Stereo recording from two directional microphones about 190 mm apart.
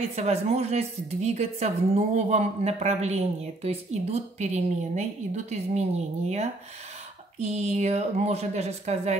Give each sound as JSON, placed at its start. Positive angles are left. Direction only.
{"t": 0.1, "sound": "a woman's voice", "side_deg": -35}